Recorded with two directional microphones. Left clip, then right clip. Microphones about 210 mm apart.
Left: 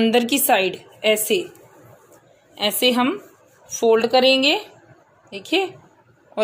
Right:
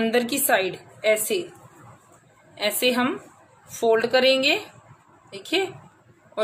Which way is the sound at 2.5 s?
20° left (ahead or behind).